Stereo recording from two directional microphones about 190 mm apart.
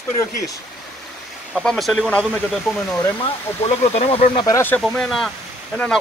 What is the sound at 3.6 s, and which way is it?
Speech, 35° left (ahead or behind).